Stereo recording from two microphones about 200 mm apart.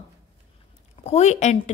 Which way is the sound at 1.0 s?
35° left (ahead or behind).